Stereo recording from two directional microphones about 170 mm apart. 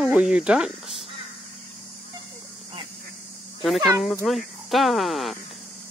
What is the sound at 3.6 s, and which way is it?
Speech, centre (ahead or behind).